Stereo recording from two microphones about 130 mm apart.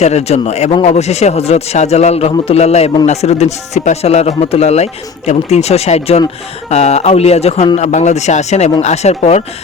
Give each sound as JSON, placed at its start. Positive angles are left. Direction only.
{"t": 0.0, "sound": "speech", "side_deg": 55}